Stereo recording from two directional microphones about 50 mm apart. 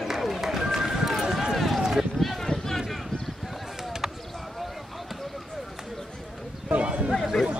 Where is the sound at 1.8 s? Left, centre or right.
Centre.